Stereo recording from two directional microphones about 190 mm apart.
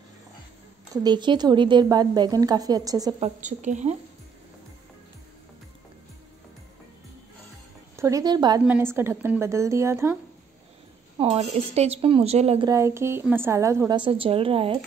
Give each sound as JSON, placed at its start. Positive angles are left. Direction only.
{"t": 1.0, "sound": "a woman's voice", "side_deg": -25}
{"t": 3.2, "sound": "a woman's voice", "side_deg": -40}
{"t": 7.9, "sound": "a woman's voice", "side_deg": -15}
{"t": 8.6, "sound": "a woman's voice", "side_deg": -10}
{"t": 11.1, "sound": "a woman's voice", "side_deg": -30}
{"t": 12.6, "sound": "a woman's voice", "side_deg": -15}